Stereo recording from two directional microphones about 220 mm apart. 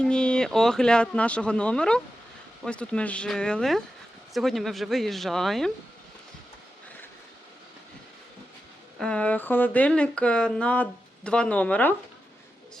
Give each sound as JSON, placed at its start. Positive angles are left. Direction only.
{"t": 0.0, "sound": "speech", "side_deg": 5}
{"t": 9.0, "sound": "speech", "side_deg": 5}